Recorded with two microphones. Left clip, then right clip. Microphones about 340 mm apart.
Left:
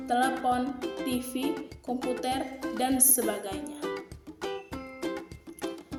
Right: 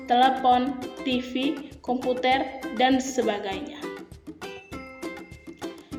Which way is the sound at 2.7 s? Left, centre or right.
Left.